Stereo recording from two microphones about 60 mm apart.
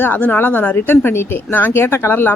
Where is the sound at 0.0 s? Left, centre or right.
Left.